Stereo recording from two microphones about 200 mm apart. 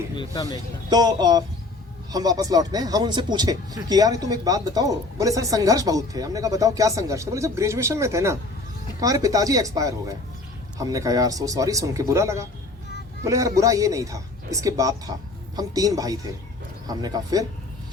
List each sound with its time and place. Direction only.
0.9 s speech: 20° right (ahead or behind)